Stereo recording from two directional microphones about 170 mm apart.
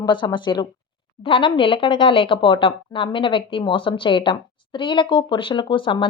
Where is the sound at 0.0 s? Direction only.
25° left (ahead or behind).